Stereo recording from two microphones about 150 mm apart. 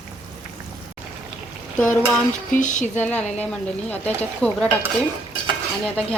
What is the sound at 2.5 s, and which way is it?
Speech, 60° left (ahead or behind).